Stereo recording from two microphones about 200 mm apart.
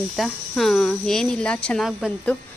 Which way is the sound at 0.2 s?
Centre (ahead or behind).